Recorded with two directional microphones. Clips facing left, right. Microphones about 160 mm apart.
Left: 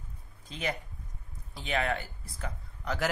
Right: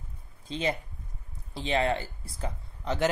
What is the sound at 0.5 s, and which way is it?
Speech, 25° right (ahead or behind).